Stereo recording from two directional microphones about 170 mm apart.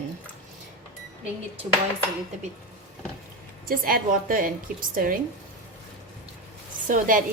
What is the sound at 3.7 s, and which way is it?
Speech, 55° right (ahead or behind).